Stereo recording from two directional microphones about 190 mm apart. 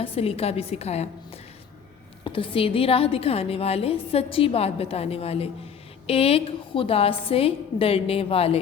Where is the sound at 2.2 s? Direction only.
30° left (ahead or behind).